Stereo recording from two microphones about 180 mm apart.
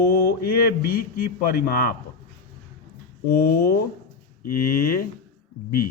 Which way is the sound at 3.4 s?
60° left (ahead or behind).